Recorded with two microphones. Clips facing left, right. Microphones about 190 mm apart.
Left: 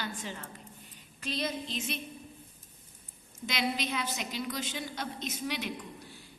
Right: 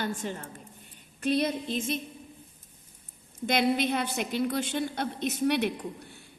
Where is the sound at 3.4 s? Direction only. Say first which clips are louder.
Right 8 dB; 55° right (ahead or behind).